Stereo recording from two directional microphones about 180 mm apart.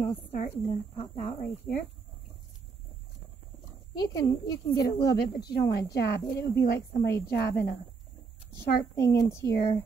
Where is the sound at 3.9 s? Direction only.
20° left (ahead or behind).